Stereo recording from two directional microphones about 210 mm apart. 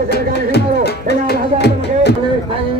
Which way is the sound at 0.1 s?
50° left (ahead or behind).